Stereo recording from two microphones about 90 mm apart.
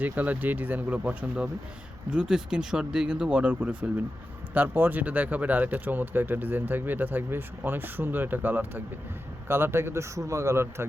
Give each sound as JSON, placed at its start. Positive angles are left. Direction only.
{"t": 0.0, "sound": "speech", "side_deg": -20}